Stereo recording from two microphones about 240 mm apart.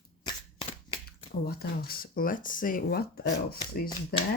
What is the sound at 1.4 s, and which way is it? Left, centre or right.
Speech, left.